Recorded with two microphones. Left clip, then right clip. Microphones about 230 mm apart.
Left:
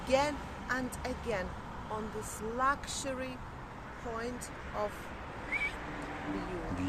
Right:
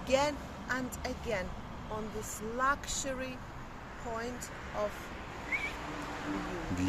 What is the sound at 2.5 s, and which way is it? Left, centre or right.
Speech, centre.